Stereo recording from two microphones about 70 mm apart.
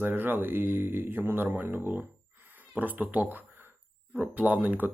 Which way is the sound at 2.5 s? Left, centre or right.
Right.